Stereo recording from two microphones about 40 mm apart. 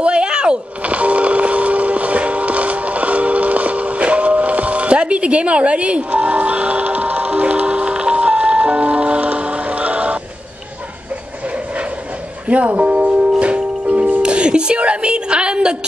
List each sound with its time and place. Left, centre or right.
0.0 s a sound: right
0.8 s music: right
11.5 s train: right
12.4 s music: right